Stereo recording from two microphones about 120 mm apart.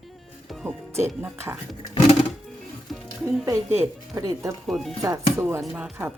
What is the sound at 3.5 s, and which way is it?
A woman's voice, 25° right (ahead or behind).